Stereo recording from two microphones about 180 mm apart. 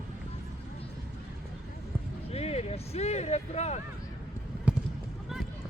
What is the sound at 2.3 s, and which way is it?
Speech, 35° left (ahead or behind).